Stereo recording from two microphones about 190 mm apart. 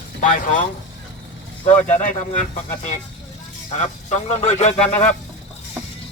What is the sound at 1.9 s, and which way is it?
Speech, 40° left (ahead or behind).